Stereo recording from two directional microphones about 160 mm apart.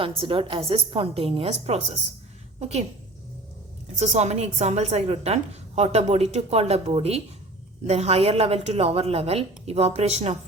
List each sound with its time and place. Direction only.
0.2 s a woman's voice: 35° right (ahead or behind)
3.9 s a woman's voice: 45° right (ahead or behind)